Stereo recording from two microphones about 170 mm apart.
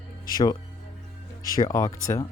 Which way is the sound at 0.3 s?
25° left (ahead or behind).